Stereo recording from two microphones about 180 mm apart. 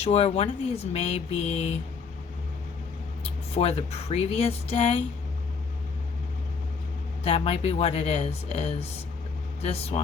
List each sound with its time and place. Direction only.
0.0 s speech: 35° left (ahead or behind)
3.5 s speech: 35° left (ahead or behind)
7.3 s speech: 35° left (ahead or behind)